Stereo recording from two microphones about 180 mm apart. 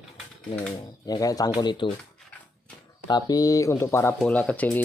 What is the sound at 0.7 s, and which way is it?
Speech, 20° left (ahead or behind).